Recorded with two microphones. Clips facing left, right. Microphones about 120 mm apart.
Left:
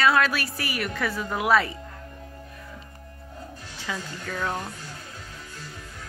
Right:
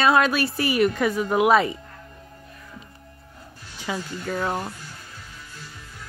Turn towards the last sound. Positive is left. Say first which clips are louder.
# right 4 dB
turn(degrees=-15)  # may be behind; listen again after turning